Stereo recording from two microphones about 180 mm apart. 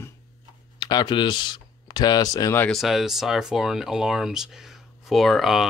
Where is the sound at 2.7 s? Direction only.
Centre (ahead or behind).